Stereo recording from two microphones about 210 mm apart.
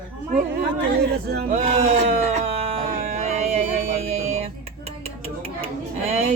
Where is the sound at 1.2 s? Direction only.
50° right (ahead or behind).